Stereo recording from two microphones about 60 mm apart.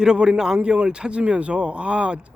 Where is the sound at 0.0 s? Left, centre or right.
Centre.